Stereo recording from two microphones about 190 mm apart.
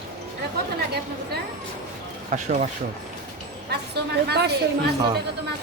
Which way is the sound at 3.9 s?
60° right (ahead or behind).